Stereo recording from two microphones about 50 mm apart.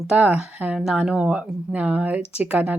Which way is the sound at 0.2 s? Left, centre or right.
Right.